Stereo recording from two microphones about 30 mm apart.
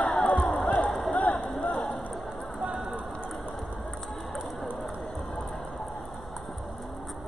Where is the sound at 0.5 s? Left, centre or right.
Left.